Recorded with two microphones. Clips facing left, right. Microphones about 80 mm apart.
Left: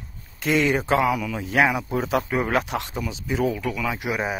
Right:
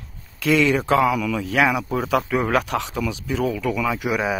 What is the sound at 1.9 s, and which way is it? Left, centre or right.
Speech, right.